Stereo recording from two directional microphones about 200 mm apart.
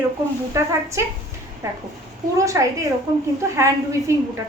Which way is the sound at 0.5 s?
15° right (ahead or behind).